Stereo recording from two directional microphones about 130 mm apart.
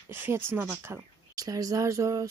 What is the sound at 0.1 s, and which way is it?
Speech, 20° right (ahead or behind).